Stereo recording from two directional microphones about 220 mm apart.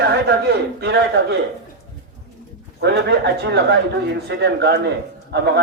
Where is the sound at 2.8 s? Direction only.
50° right (ahead or behind).